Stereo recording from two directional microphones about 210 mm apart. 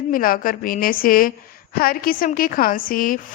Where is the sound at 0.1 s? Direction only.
45° left (ahead or behind).